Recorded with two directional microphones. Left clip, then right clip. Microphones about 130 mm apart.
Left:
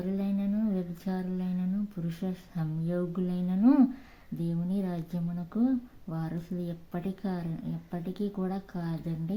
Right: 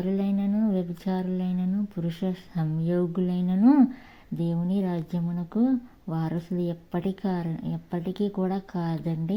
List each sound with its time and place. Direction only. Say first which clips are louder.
0.0 s speech: right 5 dB; 30° right (ahead or behind)